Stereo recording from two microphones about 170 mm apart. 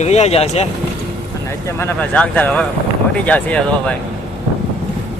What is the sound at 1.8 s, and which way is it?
Speech, 10° left (ahead or behind).